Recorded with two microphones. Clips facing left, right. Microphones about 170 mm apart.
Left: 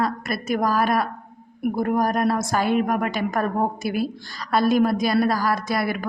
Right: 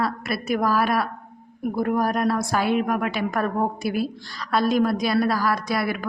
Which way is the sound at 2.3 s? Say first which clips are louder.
Left 1 dB; 20° left (ahead or behind).